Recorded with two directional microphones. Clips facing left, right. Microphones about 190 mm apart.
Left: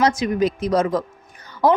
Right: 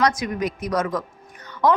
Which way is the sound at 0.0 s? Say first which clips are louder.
Left 4 dB; 25° left (ahead or behind).